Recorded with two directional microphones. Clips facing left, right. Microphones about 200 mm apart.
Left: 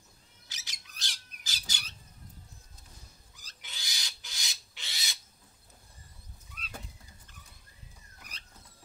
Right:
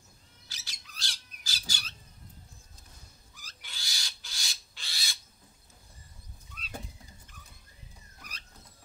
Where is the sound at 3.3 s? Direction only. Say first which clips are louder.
Even; 20° left (ahead or behind).